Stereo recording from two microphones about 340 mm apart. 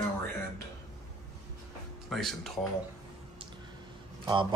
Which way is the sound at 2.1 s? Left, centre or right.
Centre.